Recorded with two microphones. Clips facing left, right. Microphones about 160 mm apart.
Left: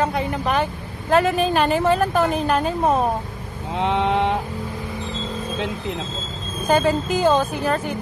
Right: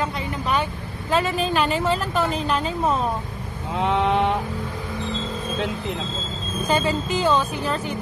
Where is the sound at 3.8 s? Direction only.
30° left (ahead or behind).